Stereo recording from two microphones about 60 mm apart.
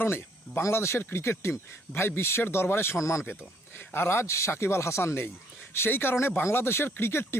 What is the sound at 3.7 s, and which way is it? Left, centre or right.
Speech, left.